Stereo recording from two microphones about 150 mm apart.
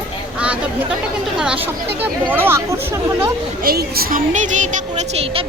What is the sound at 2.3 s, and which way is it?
Speech, 15° right (ahead or behind).